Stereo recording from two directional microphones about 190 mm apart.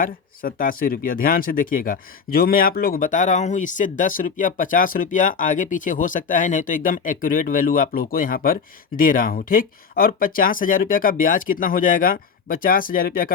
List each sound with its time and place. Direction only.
0.0 s speech: 45° left (ahead or behind)